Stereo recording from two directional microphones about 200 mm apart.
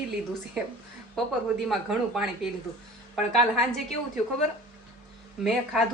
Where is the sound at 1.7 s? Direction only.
Centre (ahead or behind).